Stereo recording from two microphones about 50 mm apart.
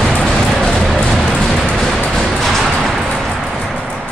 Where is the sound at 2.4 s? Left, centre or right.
Centre.